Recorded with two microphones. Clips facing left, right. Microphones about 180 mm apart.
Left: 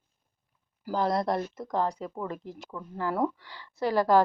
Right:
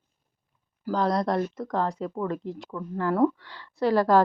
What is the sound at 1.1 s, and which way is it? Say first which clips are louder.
Speech: right 3 dB; 25° left (ahead or behind).